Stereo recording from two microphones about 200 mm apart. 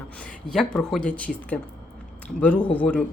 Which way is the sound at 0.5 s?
5° left (ahead or behind).